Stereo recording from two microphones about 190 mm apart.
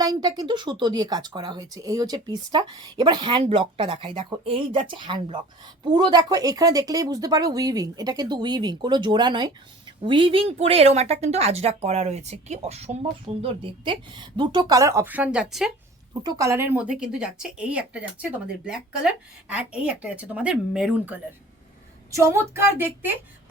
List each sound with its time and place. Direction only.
0.0 s speech: 20° right (ahead or behind); by 15.7 s 5° right (ahead or behind)
16.2 s speech: 20° right (ahead or behind)